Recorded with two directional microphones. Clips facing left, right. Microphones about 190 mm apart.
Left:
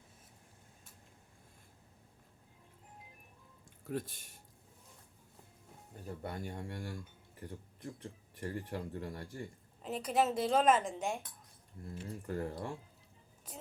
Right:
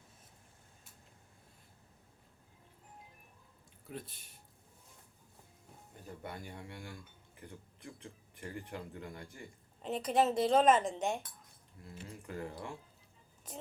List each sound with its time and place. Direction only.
3.9 s speech: 55° left (ahead or behind)
6.1 s speech: 40° left (ahead or behind)
7.3 s a sound: 40° left (ahead or behind)
8.4 s speech: 40° left (ahead or behind)
9.8 s a woman's voice: 5° left (ahead or behind)
11.8 s speech: 45° left (ahead or behind)